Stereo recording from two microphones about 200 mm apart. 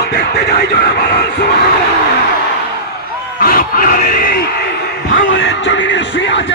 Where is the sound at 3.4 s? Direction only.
45° left (ahead or behind).